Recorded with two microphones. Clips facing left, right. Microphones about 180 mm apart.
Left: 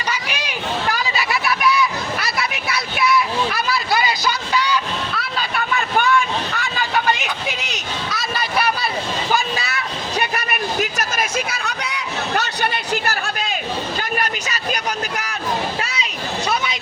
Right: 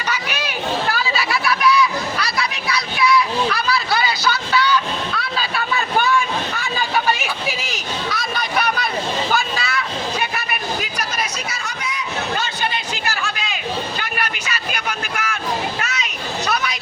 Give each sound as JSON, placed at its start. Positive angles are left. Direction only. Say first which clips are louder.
{"t": 0.1, "sound": "a sound", "louder": "right 2 dB", "side_deg": 10}
{"t": 4.3, "sound": "vehicle", "louder": "right 2 dB", "side_deg": 10}
{"t": 5.1, "sound": "vehicle", "louder": "right 1 dB", "side_deg": 0}
{"t": 6.7, "sound": "hubbub", "louder": "even", "side_deg": -10}
{"t": 10.3, "sound": "a sound", "louder": "left 3 dB", "side_deg": 45}
{"t": 11.4, "sound": "a sound", "louder": "left 2 dB", "side_deg": 60}
{"t": 13.2, "sound": "music", "louder": "left 2 dB", "side_deg": 40}
{"t": 14.2, "sound": "vehicle", "louder": "left 2 dB", "side_deg": 40}
{"t": 15.8, "sound": "children playing", "louder": "even", "side_deg": 30}